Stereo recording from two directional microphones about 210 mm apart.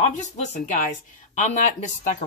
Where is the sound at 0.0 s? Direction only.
35° left (ahead or behind).